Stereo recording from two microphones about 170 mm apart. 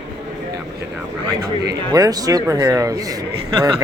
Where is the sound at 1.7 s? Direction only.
20° right (ahead or behind).